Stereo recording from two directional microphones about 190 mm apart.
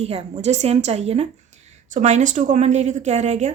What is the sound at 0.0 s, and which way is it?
A woman's voice, 35° right (ahead or behind).